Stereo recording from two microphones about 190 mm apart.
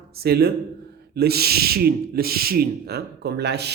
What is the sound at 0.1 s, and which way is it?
A man's voice, 55° right (ahead or behind).